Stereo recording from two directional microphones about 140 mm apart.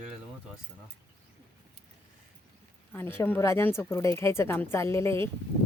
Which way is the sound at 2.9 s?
15° left (ahead or behind).